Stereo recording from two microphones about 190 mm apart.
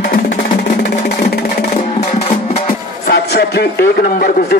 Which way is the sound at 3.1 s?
60° left (ahead or behind).